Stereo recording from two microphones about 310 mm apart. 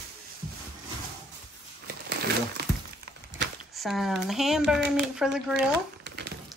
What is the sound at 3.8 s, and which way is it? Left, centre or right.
Speech, centre.